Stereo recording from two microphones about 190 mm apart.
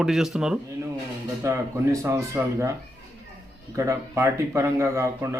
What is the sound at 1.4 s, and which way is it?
A man's voice, 15° right (ahead or behind).